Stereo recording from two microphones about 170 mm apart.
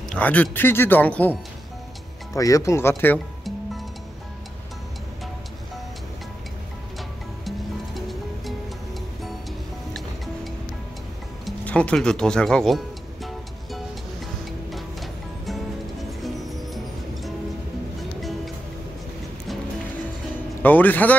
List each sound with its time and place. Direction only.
0.1 s speech: 10° left (ahead or behind)
2.3 s speech: 20° left (ahead or behind)
7.4 s music: centre (ahead or behind)
9.9 s music: centre (ahead or behind)
20.6 s speech: 10° left (ahead or behind)